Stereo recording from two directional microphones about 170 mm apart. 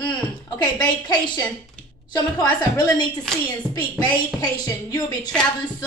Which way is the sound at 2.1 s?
25° left (ahead or behind).